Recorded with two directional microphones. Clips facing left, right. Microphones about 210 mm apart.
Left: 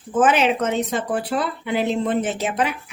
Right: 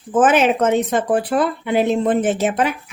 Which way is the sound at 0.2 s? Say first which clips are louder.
Right 3 dB; 50° right (ahead or behind).